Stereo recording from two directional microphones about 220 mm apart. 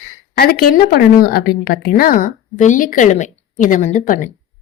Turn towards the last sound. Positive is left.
turn(degrees=35)  # may be behind; listen again after turning